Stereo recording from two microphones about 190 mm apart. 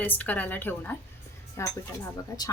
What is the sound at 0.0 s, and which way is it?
A woman's voice, 10° left (ahead or behind).